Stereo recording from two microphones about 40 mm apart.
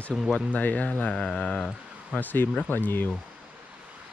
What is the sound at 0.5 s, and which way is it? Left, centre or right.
Speech, left.